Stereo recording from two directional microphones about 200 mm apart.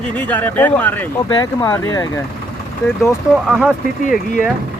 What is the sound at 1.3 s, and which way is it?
Speech, 20° left (ahead or behind).